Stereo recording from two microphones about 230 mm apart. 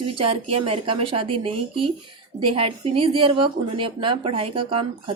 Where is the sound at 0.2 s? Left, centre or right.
Right.